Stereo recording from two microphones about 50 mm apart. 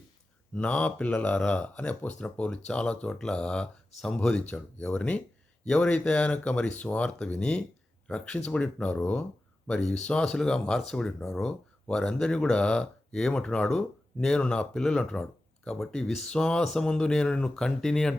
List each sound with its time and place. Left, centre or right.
0.5 s speech: left